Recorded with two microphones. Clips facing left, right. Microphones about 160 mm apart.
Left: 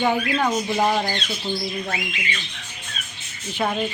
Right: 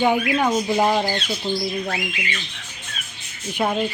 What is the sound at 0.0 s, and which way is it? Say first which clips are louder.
Speech: right 2 dB; 10° right (ahead or behind).